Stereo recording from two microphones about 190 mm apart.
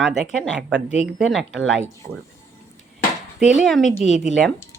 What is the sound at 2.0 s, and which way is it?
Speech, 50° right (ahead or behind).